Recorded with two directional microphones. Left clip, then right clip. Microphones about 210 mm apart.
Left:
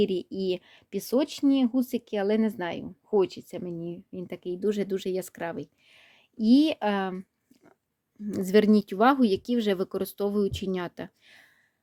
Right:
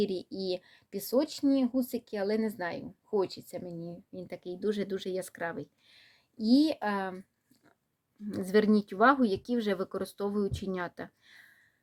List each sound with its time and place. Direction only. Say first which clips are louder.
0.1 s speech: left 5 dB; 85° left
1.1 s speech: left 3 dB; 45° left (ahead or behind)